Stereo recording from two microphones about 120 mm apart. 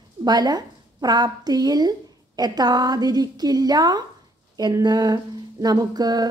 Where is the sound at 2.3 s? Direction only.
35° right (ahead or behind).